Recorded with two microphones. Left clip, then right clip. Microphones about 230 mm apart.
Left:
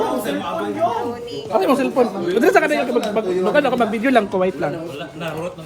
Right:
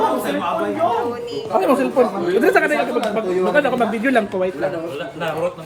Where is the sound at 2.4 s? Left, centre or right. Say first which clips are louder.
Left 1 dB; left.